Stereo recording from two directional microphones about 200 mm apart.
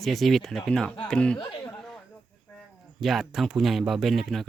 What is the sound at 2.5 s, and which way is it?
Speech, centre (ahead or behind).